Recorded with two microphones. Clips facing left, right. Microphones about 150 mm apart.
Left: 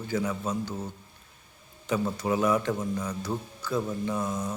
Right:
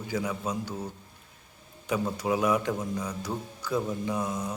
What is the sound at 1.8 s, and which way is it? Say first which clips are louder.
A man's voice: left 1 dB; 10° right (ahead or behind).